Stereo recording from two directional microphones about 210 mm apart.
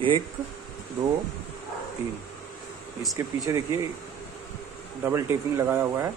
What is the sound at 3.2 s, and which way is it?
Speech, 15° right (ahead or behind).